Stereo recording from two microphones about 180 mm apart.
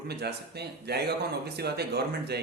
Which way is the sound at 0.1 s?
65° right (ahead or behind).